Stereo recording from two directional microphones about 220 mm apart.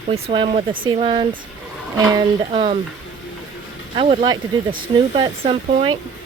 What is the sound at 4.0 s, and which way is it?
Speech, 20° right (ahead or behind).